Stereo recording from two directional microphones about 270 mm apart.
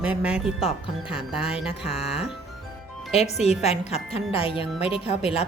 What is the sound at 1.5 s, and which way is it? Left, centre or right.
Speech, centre.